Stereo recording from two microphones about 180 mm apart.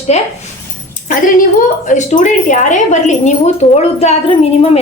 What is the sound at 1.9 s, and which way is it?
A woman's voice, 40° left (ahead or behind).